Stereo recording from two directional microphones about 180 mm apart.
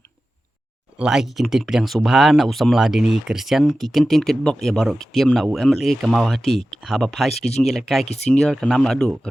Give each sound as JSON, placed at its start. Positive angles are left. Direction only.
{"t": 0.9, "sound": "speech", "side_deg": -5}
{"t": 8.0, "sound": "speech", "side_deg": 35}
{"t": 8.3, "sound": "speech", "side_deg": 5}